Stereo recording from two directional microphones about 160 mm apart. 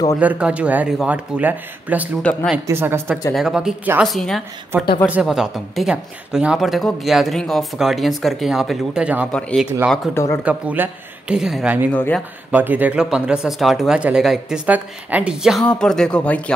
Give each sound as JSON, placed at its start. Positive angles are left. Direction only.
{"t": 0.2, "sound": "speech", "side_deg": -10}
{"t": 3.3, "sound": "a woman's voice", "side_deg": -5}
{"t": 9.3, "sound": "a woman's voice", "side_deg": 5}
{"t": 10.1, "sound": "speech", "side_deg": 15}
{"t": 10.4, "sound": "speech", "side_deg": -10}
{"t": 11.9, "sound": "speech", "side_deg": 10}
{"t": 12.4, "sound": "a woman's voice", "side_deg": -10}